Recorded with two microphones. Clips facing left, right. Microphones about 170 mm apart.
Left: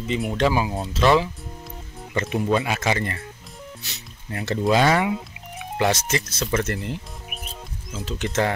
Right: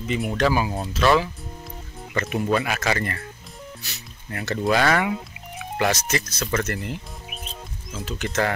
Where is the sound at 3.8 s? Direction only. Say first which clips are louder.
Even; 25° left (ahead or behind).